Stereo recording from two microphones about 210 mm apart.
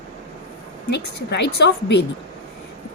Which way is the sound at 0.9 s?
55° left (ahead or behind).